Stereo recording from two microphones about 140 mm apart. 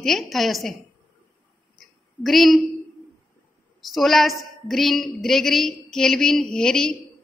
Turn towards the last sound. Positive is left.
turn(degrees=5)  # may be behind; listen again after turning